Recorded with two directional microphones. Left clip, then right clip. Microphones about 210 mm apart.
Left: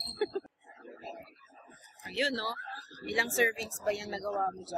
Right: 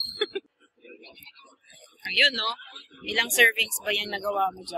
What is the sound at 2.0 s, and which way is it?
Speech, 10° left (ahead or behind).